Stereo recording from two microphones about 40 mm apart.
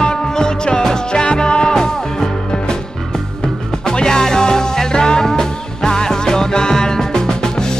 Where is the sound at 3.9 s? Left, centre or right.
Centre.